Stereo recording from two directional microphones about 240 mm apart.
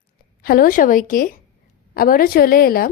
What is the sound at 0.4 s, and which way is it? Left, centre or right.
Speech, left.